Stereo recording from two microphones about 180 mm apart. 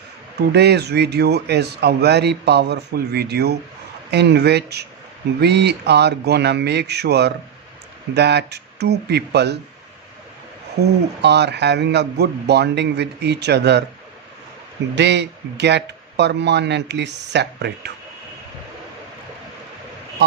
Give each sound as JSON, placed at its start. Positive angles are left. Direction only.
{"t": 0.3, "sound": "a man's voice", "side_deg": -65}
{"t": 11.2, "sound": "a man's voice", "side_deg": -70}
{"t": 14.9, "sound": "a man's voice", "side_deg": -75}